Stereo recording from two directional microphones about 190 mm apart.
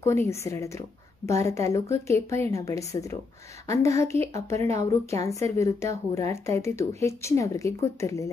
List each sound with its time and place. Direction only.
0.0 s a woman's voice: 15° left (ahead or behind)